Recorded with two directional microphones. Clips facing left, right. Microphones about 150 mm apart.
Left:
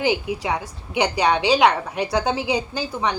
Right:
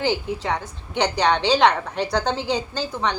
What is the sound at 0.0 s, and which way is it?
A woman's voice, 10° left (ahead or behind).